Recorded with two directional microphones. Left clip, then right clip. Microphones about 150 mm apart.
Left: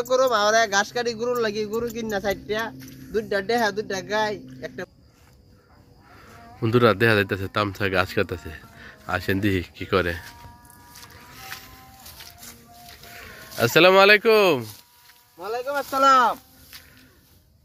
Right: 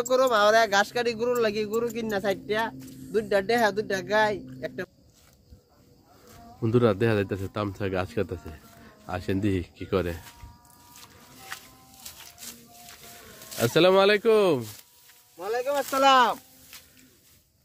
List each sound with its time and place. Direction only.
0.0 s speech: 40° right (ahead or behind)
6.6 s speech: centre (ahead or behind)
13.2 s speech: centre (ahead or behind)
15.9 s speech: 35° right (ahead or behind)
16.7 s a sound: 5° left (ahead or behind)